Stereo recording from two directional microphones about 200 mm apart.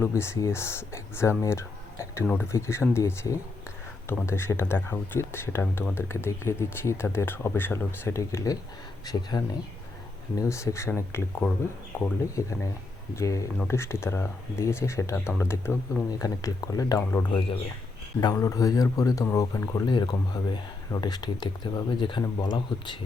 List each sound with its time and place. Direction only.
0.0 s speech: 15° left (ahead or behind)